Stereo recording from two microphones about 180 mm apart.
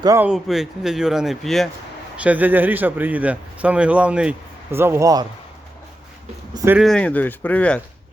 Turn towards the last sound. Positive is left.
turn(degrees=10)  # may be behind; listen again after turning